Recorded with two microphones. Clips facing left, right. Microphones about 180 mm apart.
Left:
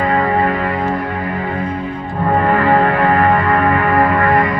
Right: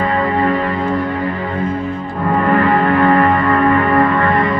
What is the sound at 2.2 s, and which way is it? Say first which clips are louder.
Music: even; 35° left (ahead or behind).